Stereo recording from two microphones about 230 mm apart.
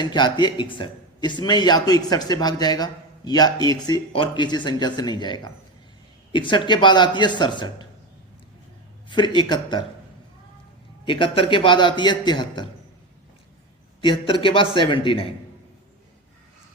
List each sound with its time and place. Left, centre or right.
0.0 s a man's voice: centre
9.0 s a man's voice: centre
11.0 s a man's voice: left
14.0 s a man's voice: left